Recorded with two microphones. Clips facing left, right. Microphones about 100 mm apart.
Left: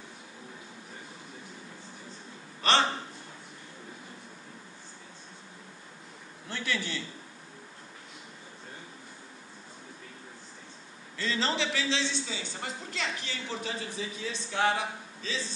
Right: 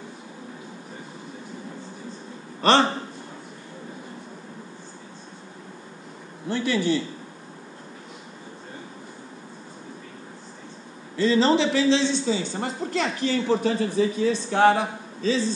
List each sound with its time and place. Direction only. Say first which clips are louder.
2.6 s a man's voice: right 7 dB; 40° right (ahead or behind)
6.5 s a man's voice: right 9 dB; 25° right (ahead or behind)
11.1 s a man's voice: right 11 dB; 20° right (ahead or behind); by 15.5 s 40° right (ahead or behind)